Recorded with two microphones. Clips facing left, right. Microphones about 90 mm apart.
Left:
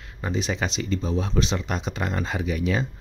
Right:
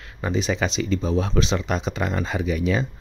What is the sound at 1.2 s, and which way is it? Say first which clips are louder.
Speech: right 3 dB; 90° right.